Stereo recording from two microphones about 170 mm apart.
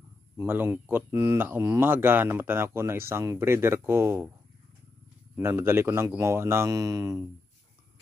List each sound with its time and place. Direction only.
0.4 s speech: 10° right (ahead or behind)
5.3 s speech: 15° right (ahead or behind)